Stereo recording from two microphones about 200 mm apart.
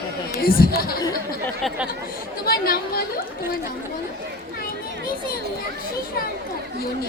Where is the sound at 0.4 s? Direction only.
50° left (ahead or behind).